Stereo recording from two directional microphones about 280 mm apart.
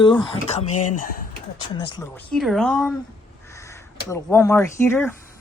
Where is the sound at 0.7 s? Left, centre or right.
Left.